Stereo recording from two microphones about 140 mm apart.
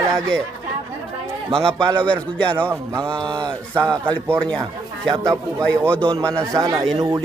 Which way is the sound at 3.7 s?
20° right (ahead or behind).